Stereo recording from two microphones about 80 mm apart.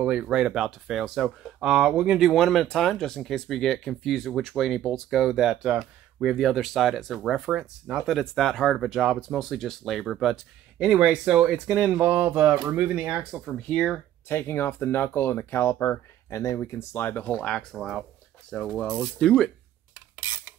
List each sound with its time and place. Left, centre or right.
0.0 s speech: centre
14.2 s speech: left
16.3 s speech: left; by 17.8 s centre
18.5 s mechanisms: centre